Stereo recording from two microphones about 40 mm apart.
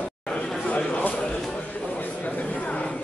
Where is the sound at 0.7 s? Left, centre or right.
Left.